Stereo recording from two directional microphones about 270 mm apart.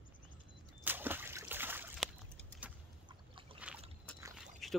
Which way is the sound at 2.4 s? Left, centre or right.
Centre.